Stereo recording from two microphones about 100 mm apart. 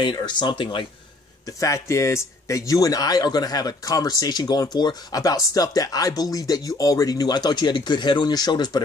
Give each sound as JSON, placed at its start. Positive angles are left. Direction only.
{"t": 0.0, "sound": "speech", "side_deg": 45}
{"t": 1.4, "sound": "speech", "side_deg": 30}